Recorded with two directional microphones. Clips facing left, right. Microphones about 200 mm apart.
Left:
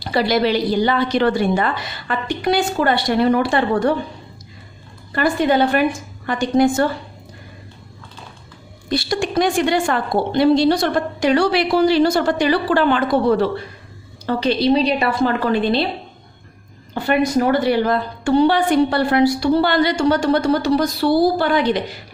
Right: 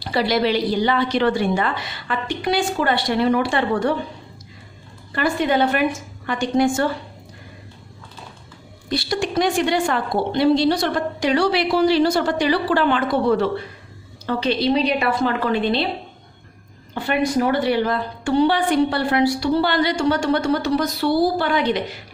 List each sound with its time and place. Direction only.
0.0 s a woman's voice: 45° left (ahead or behind)
5.1 s a woman's voice: 35° left (ahead or behind)
8.9 s a woman's voice: 50° left (ahead or behind)
17.5 s a woman's voice: 45° left (ahead or behind)